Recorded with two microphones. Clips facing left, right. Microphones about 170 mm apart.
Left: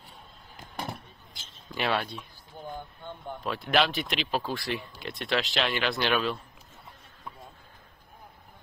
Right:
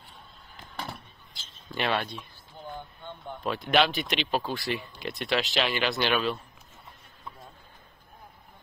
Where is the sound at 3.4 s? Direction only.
Centre (ahead or behind).